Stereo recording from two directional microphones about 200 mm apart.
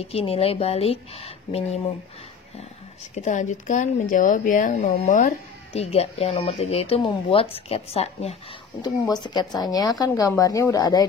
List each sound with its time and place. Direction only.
0.1 s speech: 30° left (ahead or behind)
3.2 s speech: 40° left (ahead or behind)
9.1 s speech: 20° left (ahead or behind)